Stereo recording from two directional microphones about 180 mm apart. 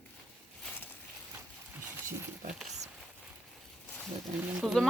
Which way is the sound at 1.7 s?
10° right (ahead or behind).